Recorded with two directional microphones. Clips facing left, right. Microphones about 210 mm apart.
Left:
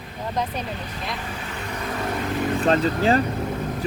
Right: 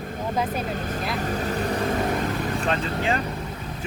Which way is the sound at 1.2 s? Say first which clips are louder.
Right 7 dB; 40° right (ahead or behind).